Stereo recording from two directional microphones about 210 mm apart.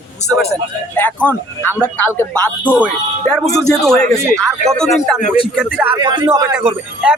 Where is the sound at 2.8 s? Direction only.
5° left (ahead or behind).